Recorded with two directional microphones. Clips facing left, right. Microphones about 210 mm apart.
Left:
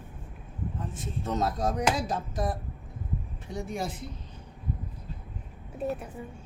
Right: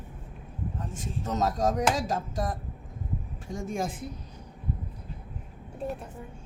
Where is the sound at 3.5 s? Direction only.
45° right (ahead or behind).